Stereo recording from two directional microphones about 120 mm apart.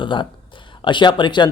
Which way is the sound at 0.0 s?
40° left (ahead or behind).